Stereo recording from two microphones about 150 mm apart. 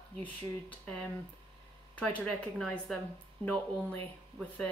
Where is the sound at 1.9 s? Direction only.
10° left (ahead or behind).